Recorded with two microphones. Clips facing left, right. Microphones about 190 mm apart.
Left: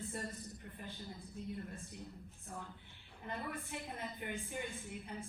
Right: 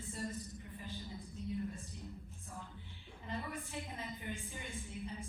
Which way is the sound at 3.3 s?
60° left (ahead or behind).